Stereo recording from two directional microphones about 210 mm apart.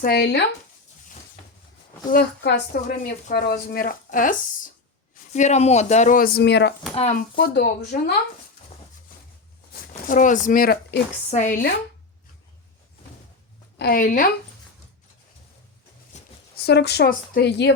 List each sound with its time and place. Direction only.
0.0 s a woman's voice: 50° left (ahead or behind)
2.0 s a woman's voice: 45° left (ahead or behind)
6.9 s speech: 30° left (ahead or behind)
7.3 s a woman's voice: 50° left (ahead or behind)
10.1 s speech: 40° left (ahead or behind)
11.3 s speech: 35° left (ahead or behind)
13.7 s speech: 45° left (ahead or behind)
16.1 s a sound: 35° left (ahead or behind)
16.6 s a woman's voice: 50° left (ahead or behind)